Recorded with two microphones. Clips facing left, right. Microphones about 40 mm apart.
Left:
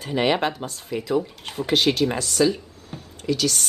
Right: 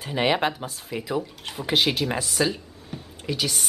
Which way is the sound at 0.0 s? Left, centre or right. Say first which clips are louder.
Left 1 dB; centre.